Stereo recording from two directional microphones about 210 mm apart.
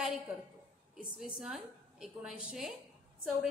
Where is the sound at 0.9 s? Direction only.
Centre (ahead or behind).